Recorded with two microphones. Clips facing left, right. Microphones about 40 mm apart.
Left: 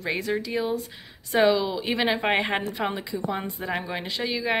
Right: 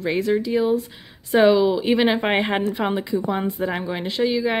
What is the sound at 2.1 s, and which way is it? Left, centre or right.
Speech, right.